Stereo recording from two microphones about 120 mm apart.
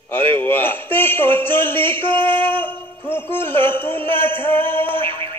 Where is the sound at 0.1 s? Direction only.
15° left (ahead or behind).